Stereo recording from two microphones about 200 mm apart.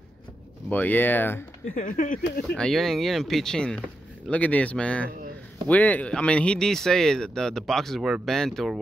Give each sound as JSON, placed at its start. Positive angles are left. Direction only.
{"t": 0.7, "sound": "speech", "side_deg": 10}
{"t": 1.8, "sound": "speech", "side_deg": 40}
{"t": 2.5, "sound": "speech", "side_deg": 0}